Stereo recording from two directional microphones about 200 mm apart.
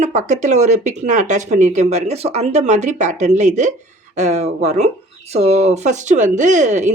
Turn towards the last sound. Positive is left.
turn(degrees=-35)  # may be behind; listen again after turning